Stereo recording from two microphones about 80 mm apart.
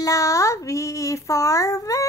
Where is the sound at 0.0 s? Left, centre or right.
Left.